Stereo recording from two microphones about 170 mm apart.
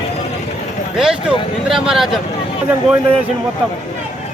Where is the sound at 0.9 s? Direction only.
Centre (ahead or behind).